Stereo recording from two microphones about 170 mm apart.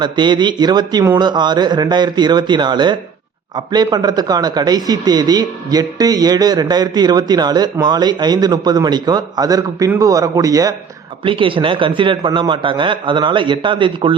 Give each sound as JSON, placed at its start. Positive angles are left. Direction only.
{"t": 0.0, "sound": "speech", "side_deg": -25}